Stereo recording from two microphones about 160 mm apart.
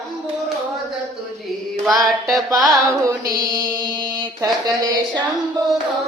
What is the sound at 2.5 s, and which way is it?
Music, 20° right (ahead or behind).